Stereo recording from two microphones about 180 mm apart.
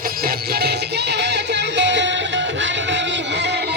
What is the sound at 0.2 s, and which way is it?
Music, 60° right (ahead or behind).